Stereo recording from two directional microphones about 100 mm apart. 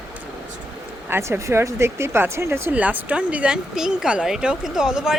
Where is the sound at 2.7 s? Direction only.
15° right (ahead or behind).